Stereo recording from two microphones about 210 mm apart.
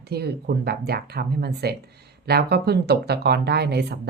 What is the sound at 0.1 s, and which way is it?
Speech, 50° right (ahead or behind).